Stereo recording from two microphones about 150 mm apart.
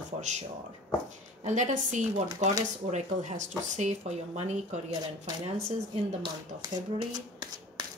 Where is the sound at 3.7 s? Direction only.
50° right (ahead or behind).